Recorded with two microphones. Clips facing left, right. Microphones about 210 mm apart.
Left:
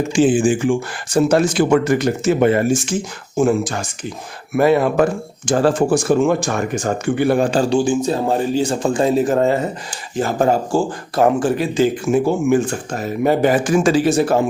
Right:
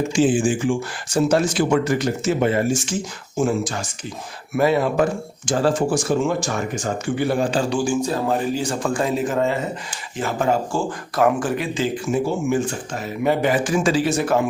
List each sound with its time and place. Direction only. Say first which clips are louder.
0.1 s speech: left 5 dB; 55° left (ahead or behind)
7.7 s a man's voice: left 4 dB; 25° left (ahead or behind); by 12.1 s 40° left (ahead or behind)
12.1 s speech: left 4 dB; 60° left (ahead or behind)
12.9 s speech: left 4 dB; 40° left (ahead or behind)